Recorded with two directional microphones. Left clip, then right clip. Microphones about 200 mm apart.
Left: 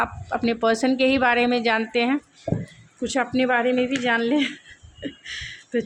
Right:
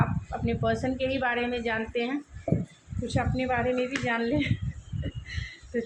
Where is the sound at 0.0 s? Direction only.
55° left (ahead or behind).